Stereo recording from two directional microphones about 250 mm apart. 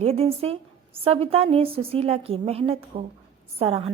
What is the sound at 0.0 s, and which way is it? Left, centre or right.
A woman's voice, right.